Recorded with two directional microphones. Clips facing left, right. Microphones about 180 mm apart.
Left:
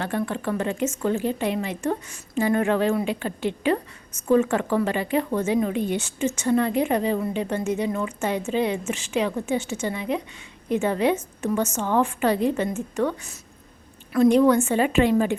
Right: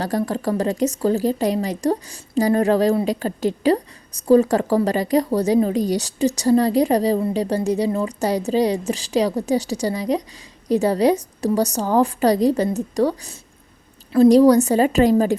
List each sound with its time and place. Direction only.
0.0 s a woman's voice: 35° right (ahead or behind)